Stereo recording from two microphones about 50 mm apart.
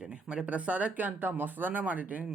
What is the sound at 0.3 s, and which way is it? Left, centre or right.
Speech, right.